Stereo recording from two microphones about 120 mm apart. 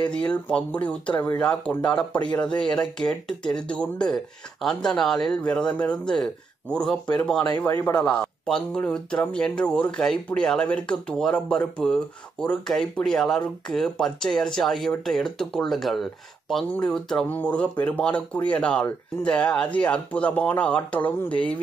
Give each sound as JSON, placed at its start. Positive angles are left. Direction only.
{"t": 0.1, "sound": "speech", "side_deg": 10}
{"t": 7.7, "sound": "speech", "side_deg": 30}
{"t": 8.0, "sound": "speech", "side_deg": 10}